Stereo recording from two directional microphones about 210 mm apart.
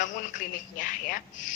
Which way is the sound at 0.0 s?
35° left (ahead or behind).